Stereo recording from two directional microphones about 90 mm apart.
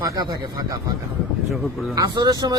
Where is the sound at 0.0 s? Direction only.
40° right (ahead or behind).